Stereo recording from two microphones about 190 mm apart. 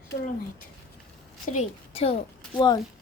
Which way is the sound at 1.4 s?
35° left (ahead or behind).